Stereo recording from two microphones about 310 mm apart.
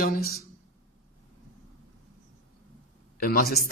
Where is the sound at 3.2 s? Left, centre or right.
Left.